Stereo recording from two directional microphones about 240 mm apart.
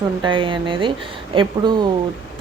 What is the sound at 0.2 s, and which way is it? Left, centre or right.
A woman's voice, centre.